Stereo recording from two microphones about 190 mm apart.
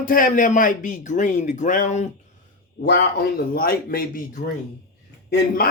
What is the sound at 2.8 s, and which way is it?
Speech, 55° left (ahead or behind).